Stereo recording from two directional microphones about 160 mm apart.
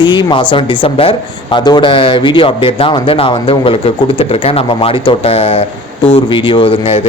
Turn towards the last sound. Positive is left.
turn(degrees=40)  # may be behind; listen again after turning